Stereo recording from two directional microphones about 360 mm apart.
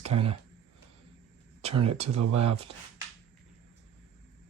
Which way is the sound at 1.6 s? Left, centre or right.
Centre.